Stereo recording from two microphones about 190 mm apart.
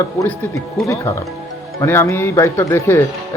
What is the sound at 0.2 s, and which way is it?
Speech, 15° left (ahead or behind).